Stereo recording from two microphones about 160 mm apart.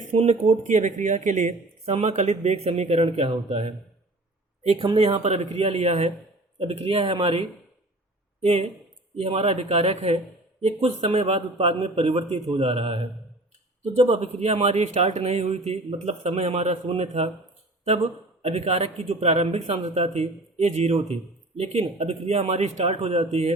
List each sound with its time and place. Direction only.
0.0 s speech: 45° right (ahead or behind)
4.8 s speech: 30° right (ahead or behind)
18.4 s speech: 40° right (ahead or behind)